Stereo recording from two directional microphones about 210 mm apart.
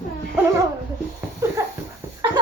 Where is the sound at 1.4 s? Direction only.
15° right (ahead or behind).